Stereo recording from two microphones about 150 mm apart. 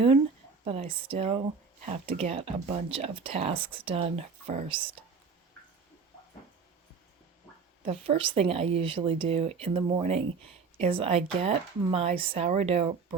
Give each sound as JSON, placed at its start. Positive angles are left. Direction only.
{"t": 0.6, "sound": "speech", "side_deg": -40}
{"t": 7.9, "sound": "speech", "side_deg": -40}